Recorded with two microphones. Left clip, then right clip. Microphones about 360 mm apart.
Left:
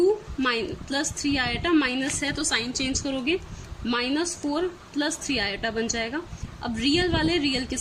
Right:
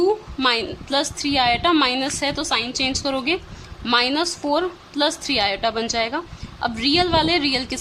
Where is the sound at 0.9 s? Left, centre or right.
Centre.